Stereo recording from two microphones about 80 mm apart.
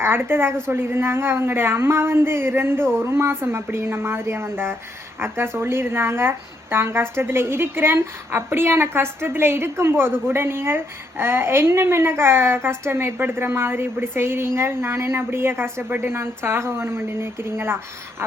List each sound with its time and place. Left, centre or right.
0.0 s speech: right